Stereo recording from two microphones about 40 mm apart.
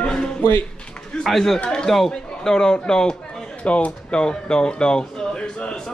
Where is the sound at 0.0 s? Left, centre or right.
Centre.